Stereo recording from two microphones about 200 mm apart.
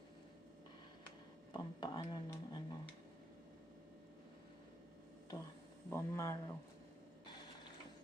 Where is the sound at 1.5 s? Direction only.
20° left (ahead or behind).